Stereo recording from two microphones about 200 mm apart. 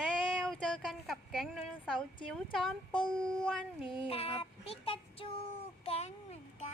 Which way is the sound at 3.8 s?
25° left (ahead or behind).